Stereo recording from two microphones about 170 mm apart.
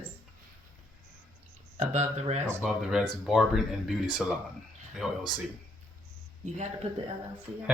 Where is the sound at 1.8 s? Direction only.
40° right (ahead or behind).